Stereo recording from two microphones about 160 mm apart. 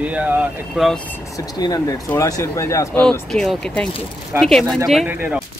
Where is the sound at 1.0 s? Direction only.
15° left (ahead or behind).